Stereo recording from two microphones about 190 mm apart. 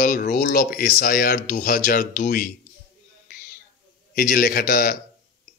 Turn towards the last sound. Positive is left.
turn(degrees=50)  # may be behind; listen again after turning